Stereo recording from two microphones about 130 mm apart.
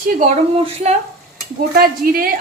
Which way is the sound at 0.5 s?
55° right (ahead or behind).